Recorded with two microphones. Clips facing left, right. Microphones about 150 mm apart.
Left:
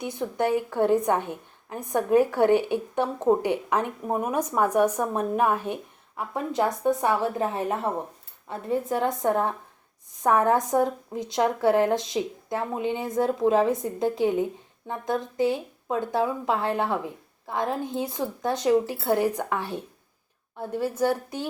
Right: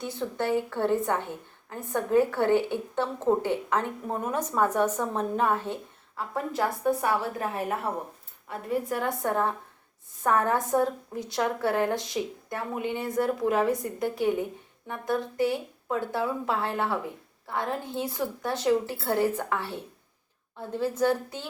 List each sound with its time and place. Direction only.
0.0 s a woman's voice: 15° left (ahead or behind)